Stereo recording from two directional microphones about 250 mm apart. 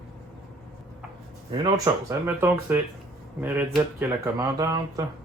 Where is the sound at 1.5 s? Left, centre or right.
Centre.